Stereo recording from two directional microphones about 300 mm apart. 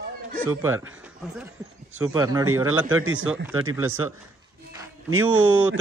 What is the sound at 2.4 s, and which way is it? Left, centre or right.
A man's voice, right.